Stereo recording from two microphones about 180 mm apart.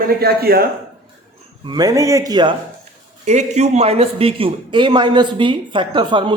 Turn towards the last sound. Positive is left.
turn(degrees=-25)  # may be behind; listen again after turning